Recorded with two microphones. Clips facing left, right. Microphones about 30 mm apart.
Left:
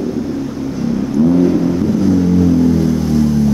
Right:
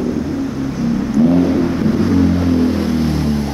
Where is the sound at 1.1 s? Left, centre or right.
Right.